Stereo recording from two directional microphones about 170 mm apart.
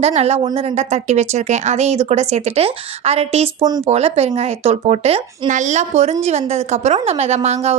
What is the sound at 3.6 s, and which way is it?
Speech, 25° right (ahead or behind).